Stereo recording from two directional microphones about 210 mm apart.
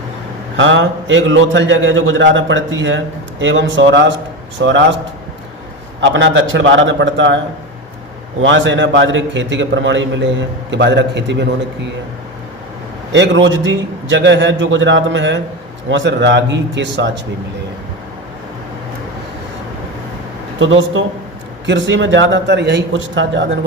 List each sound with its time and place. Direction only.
0.5 s a man's voice: 65° right (ahead or behind)
6.0 s a man's voice: 60° right (ahead or behind)
8.4 s a man's voice: 60° right (ahead or behind)
13.1 s a man's voice: 60° right (ahead or behind)
21.7 s a man's voice: 60° right (ahead or behind)